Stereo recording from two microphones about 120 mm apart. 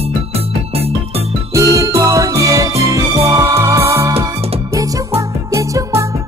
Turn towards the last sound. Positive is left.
turn(degrees=-25)  # may be behind; listen again after turning